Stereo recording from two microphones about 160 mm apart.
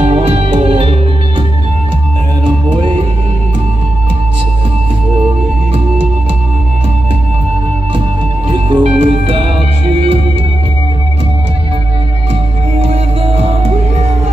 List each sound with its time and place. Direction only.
0.0 s music: 40° right (ahead or behind)
2.8 s music: 30° right (ahead or behind)
8.5 s music: 30° right (ahead or behind)
12.7 s music: 40° right (ahead or behind)